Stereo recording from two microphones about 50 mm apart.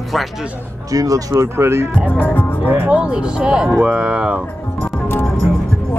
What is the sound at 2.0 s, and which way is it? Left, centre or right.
Speech, left.